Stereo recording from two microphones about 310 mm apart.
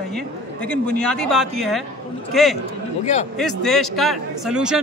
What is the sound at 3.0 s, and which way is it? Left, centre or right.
Speech, left.